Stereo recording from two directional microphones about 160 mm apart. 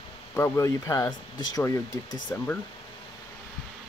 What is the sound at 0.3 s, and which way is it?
Speech, 15° left (ahead or behind).